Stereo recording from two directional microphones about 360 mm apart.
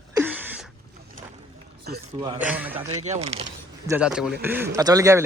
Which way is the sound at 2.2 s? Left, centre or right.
Centre.